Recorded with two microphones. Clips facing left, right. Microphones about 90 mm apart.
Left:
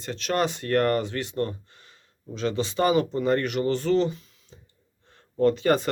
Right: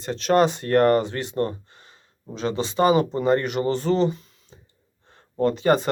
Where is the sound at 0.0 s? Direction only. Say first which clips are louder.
Right 7 dB; 30° right (ahead or behind).